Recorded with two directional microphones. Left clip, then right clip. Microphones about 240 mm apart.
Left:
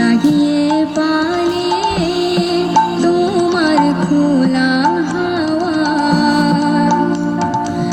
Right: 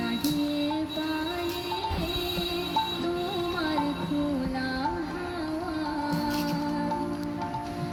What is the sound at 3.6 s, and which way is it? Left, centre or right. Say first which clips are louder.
Music: left 16 dB; left.